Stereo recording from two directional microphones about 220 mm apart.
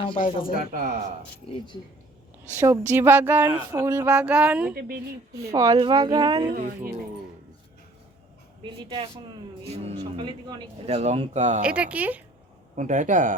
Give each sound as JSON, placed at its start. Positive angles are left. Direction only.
{"t": 0.2, "sound": "speech", "side_deg": 35}
{"t": 1.5, "sound": "speech", "side_deg": 20}
{"t": 2.6, "sound": "a sound", "side_deg": -10}
{"t": 4.7, "sound": "a woman's voice", "side_deg": -45}
{"t": 5.4, "sound": "a sound", "side_deg": -15}
{"t": 6.5, "sound": "speech", "side_deg": -40}
{"t": 8.6, "sound": "speech", "side_deg": -25}
{"t": 11.6, "sound": "a sound", "side_deg": -5}
{"t": 12.7, "sound": "speech", "side_deg": -35}